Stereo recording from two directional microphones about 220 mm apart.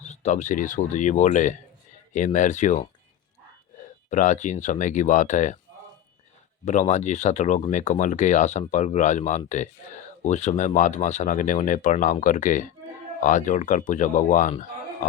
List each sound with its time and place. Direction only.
0.0 s speech: 30° left (ahead or behind)
4.1 s speech: 35° left (ahead or behind)
6.7 s speech: 30° left (ahead or behind)